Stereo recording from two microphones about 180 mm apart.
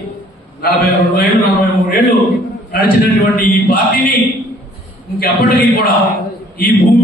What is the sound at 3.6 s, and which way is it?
Speech, 55° left (ahead or behind).